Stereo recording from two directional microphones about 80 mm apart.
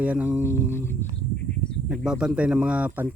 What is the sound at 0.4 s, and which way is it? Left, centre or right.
Music, left.